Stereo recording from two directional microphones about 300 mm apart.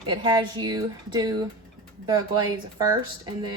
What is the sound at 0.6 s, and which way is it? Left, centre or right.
A woman's voice, centre.